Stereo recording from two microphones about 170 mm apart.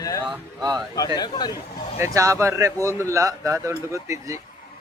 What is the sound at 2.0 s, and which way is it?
Speech, 20° right (ahead or behind).